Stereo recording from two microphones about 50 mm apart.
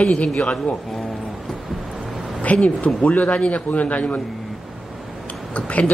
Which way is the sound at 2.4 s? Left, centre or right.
Left.